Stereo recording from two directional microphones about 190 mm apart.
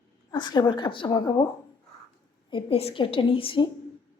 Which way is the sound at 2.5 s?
30° left (ahead or behind).